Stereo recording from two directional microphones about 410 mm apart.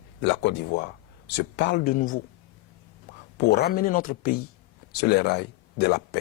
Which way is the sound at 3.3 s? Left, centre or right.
Left.